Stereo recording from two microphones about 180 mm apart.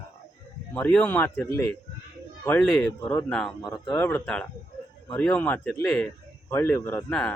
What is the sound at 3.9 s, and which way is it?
A man's voice, 10° left (ahead or behind).